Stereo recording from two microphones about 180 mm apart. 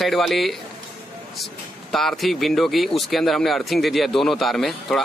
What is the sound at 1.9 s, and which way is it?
Speech, centre (ahead or behind).